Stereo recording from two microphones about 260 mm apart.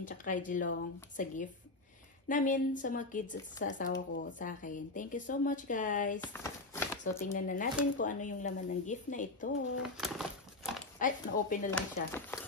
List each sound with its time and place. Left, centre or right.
0.0 s speech: left
6.2 s a sound: centre
7.3 s speech: left
9.8 s a sound: centre
11.0 s speech: left
11.7 s speech: centre